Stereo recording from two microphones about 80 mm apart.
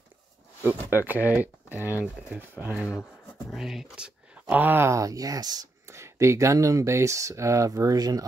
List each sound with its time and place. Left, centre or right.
0.7 s speech: right
3.5 s speech: centre; by 4.9 s right
4.9 s speech: right
5.9 s speech: right